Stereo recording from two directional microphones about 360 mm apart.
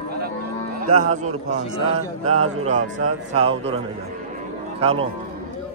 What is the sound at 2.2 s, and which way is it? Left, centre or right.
Speech, right.